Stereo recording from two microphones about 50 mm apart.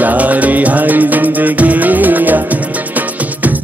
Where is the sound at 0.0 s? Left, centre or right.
Right.